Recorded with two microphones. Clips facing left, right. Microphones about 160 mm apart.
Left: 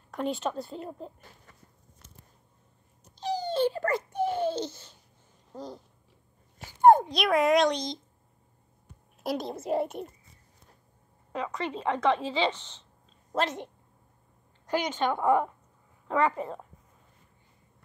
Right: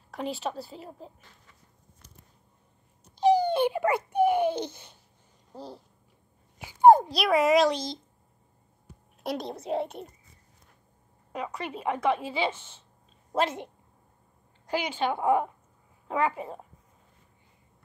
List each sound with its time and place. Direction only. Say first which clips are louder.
0.2 s speech: left 2 dB; 5° right (ahead or behind)
3.2 s babbling: right 6 dB; 15° right (ahead or behind)
5.5 s a sound: left 2 dB; 30° right (ahead or behind)
6.6 s a woman's voice: right 2 dB; 5° right (ahead or behind)
11.3 s a woman's voice: left 2 dB; 10° right (ahead or behind)
14.7 s a woman's voice: left 1 dB; 10° right (ahead or behind)